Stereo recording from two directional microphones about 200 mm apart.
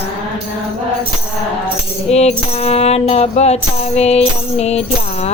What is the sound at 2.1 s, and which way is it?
Music, 30° left (ahead or behind).